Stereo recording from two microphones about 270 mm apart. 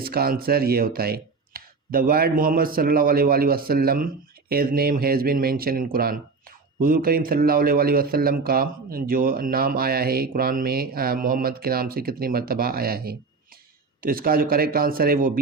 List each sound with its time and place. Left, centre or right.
0.0 s a man's voice: right